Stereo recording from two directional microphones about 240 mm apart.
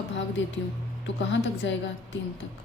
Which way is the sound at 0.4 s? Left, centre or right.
Left.